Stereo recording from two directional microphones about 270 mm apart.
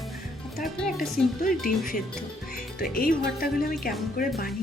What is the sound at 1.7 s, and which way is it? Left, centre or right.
A woman's voice, left.